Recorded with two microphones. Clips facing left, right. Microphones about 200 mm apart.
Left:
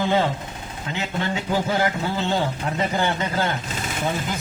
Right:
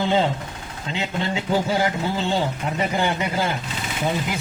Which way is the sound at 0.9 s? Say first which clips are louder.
Right 1 dB; 20° right (ahead or behind).